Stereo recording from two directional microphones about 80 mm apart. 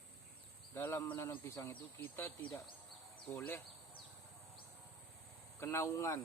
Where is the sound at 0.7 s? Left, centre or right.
Left.